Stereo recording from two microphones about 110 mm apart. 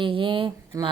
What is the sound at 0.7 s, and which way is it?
Speech, 35° right (ahead or behind).